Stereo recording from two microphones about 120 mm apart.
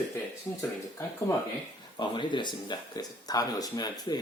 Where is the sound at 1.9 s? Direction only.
40° left (ahead or behind).